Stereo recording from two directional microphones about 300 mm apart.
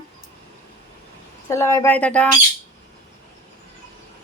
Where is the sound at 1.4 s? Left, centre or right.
Centre.